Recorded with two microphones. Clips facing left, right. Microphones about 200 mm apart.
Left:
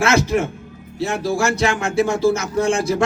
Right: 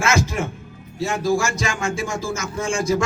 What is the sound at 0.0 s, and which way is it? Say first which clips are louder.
A man's voice: left 4 dB; 60° left (ahead or behind).